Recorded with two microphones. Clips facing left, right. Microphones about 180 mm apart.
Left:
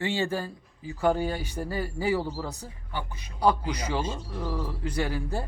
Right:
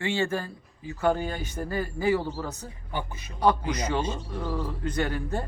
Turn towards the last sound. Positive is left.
turn(degrees=10)  # may be behind; listen again after turning